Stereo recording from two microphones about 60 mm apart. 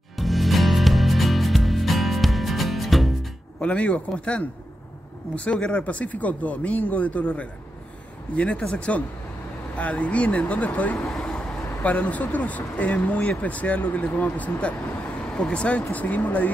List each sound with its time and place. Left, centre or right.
0.2 s music: centre
3.6 s speech: centre
11.1 s vehicle: centre
11.8 s speech: left
15.2 s speech: centre; by 16.5 s left